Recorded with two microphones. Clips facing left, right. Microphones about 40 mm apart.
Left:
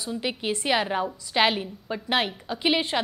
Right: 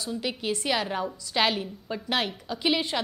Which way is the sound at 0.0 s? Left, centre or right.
Centre.